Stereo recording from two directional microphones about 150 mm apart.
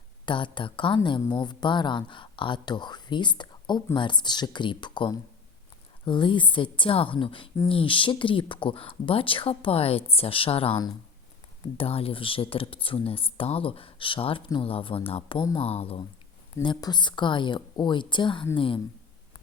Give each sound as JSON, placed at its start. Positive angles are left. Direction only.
{"t": 0.3, "sound": "speech", "side_deg": 35}
{"t": 16.6, "sound": "speech", "side_deg": 30}